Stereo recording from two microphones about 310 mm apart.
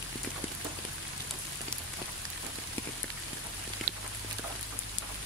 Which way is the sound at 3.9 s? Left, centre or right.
Right.